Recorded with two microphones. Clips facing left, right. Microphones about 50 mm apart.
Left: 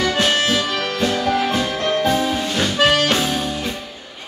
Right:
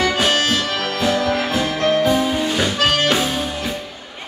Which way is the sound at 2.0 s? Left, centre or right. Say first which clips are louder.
Right 1 dB; centre.